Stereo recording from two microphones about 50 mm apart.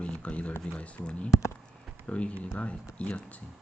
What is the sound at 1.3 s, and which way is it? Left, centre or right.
Speech, left.